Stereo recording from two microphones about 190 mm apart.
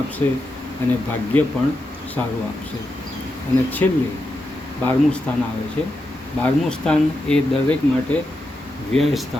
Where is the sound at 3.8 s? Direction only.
15° left (ahead or behind).